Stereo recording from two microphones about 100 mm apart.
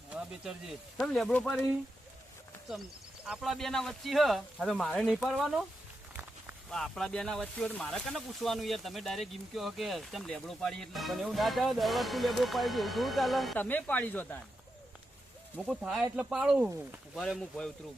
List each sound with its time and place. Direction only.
0.1 s speech: 5° right (ahead or behind)
0.9 s speech: 5° left (ahead or behind)
3.2 s speech: centre (ahead or behind)
6.7 s speech: 5° left (ahead or behind)
13.6 s speech: 15° left (ahead or behind)
15.6 s speech: 5° right (ahead or behind)